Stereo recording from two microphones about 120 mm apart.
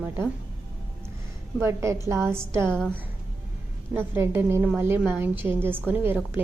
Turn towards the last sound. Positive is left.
turn(degrees=-15)  # may be behind; listen again after turning